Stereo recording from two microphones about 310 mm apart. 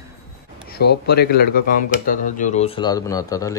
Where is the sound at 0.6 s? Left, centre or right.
Left.